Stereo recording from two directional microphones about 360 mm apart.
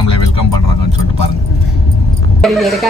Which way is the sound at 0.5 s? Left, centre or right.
Left.